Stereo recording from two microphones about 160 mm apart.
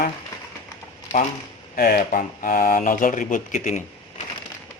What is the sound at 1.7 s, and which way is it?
Speech, 65° left (ahead or behind).